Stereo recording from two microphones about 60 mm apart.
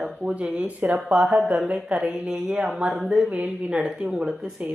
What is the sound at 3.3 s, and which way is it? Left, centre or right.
Speech, right.